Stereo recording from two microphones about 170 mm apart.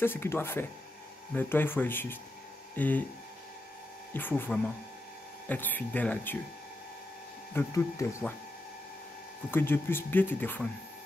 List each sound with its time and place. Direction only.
0.0 s speech: 15° left (ahead or behind)
4.1 s speech: 10° left (ahead or behind)
7.5 s speech: 15° left (ahead or behind)
9.5 s speech: 15° left (ahead or behind)